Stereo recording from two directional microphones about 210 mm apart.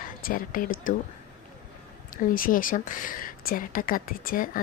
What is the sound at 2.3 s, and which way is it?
Speech, 40° left (ahead or behind).